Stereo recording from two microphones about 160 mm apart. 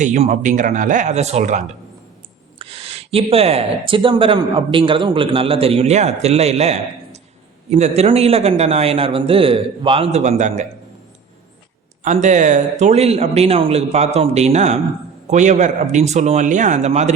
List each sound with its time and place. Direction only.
0.0 s speech: 50° right (ahead or behind)
12.0 s speech: 50° right (ahead or behind)